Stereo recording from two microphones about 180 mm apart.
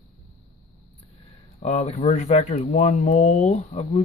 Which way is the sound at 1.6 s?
40° left (ahead or behind).